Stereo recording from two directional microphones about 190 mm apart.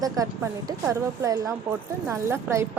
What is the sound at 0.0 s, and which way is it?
A woman's voice, 15° right (ahead or behind).